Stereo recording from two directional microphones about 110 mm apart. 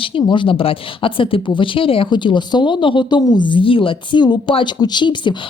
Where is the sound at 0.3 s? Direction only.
50° left (ahead or behind).